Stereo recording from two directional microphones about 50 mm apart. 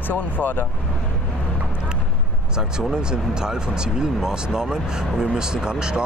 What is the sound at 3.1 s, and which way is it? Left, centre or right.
Speech, centre.